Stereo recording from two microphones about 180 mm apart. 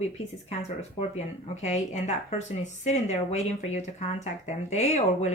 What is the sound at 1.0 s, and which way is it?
Speech, 40° left (ahead or behind).